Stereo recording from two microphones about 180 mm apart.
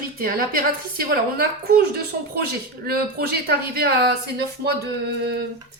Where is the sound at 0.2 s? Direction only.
55° right (ahead or behind).